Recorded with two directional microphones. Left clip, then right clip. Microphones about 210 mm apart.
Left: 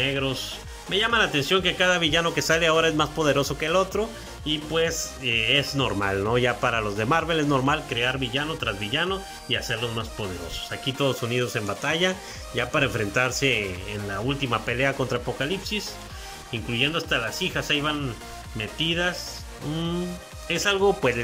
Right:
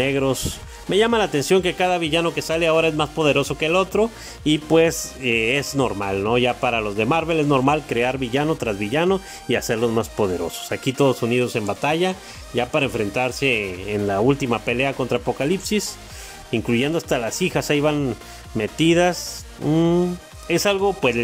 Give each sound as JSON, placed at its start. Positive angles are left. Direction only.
{"t": 0.0, "sound": "a man's voice", "side_deg": -25}
{"t": 5.9, "sound": "a man's voice", "side_deg": -15}